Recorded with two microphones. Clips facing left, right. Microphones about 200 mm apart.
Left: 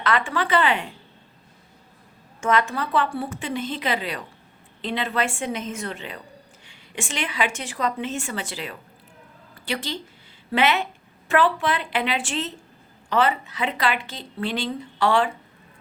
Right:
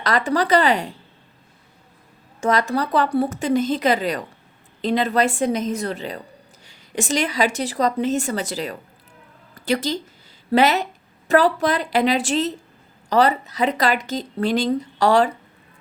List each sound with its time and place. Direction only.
0.0 s speech: 40° right (ahead or behind)
2.4 s a woman's voice: 35° right (ahead or behind)